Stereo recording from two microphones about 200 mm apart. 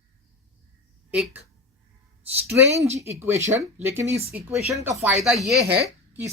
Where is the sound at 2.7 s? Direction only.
35° right (ahead or behind).